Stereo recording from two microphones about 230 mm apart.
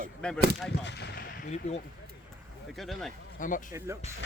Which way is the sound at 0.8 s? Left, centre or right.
Left.